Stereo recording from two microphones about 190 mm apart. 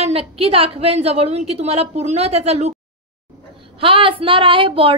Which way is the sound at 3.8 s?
30° right (ahead or behind).